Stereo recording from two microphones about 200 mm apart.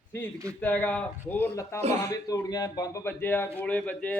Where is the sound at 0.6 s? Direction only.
10° left (ahead or behind).